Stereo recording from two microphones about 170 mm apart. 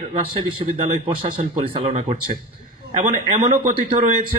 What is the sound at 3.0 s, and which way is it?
Speech, 45° right (ahead or behind).